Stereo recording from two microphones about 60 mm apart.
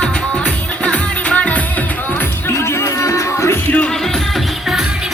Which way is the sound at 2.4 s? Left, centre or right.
Left.